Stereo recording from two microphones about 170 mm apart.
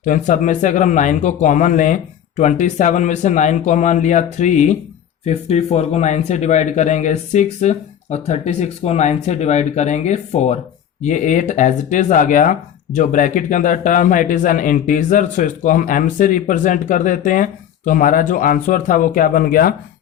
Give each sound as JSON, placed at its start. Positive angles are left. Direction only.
{"t": 0.0, "sound": "speech", "side_deg": 50}